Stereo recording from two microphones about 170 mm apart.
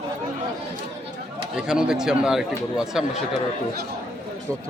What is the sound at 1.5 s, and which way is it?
Speech, 5° right (ahead or behind).